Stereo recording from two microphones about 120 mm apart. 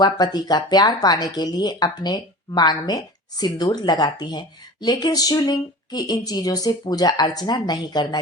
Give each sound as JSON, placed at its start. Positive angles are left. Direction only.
{"t": 0.0, "sound": "speech", "side_deg": 35}